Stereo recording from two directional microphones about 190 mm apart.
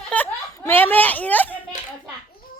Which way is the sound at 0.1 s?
10° left (ahead or behind).